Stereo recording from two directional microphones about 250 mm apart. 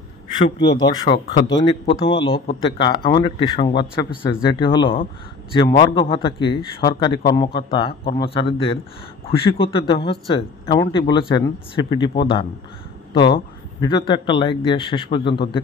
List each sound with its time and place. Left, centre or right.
0.4 s a man's voice: centre
9.2 s a man's voice: left